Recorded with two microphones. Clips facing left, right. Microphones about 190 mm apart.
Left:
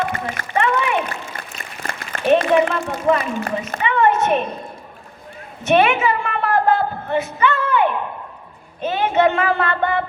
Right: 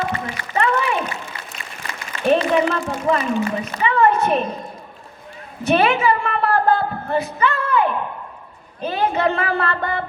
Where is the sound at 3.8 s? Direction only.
35° right (ahead or behind).